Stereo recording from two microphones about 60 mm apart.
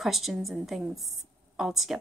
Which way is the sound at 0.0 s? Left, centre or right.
Centre.